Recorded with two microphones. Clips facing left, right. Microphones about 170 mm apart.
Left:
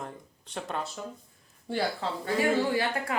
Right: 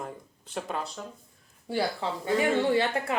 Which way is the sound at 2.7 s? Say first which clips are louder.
Right 3 dB; 25° right (ahead or behind).